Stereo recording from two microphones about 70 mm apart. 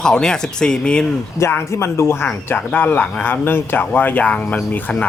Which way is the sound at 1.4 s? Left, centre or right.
Left.